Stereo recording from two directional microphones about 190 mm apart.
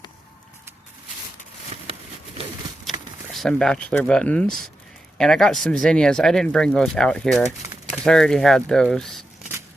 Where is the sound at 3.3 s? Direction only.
Centre (ahead or behind).